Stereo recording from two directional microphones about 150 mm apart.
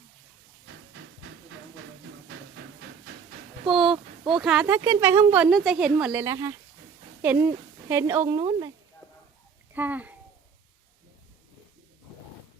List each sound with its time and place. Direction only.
3.7 s a woman's voice: 5° right (ahead or behind)
3.9 s a sound: 30° right (ahead or behind)
4.4 s a woman's voice: 5° right (ahead or behind)
4.6 s speech: 15° right (ahead or behind)
5.5 s a woman's voice: centre (ahead or behind)
6.2 s a woman's voice: 20° right (ahead or behind)
8.4 s speech: 25° right (ahead or behind)
9.7 s a child's voice: 10° right (ahead or behind)